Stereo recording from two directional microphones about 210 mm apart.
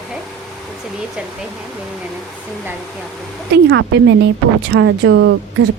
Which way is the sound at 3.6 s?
60° right (ahead or behind).